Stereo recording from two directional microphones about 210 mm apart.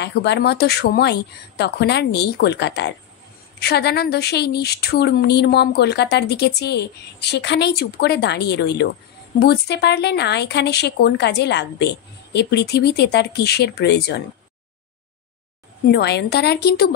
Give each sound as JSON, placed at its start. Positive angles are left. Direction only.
{"t": 0.0, "sound": "a woman's voice", "side_deg": 55}
{"t": 15.9, "sound": "a woman's voice", "side_deg": 50}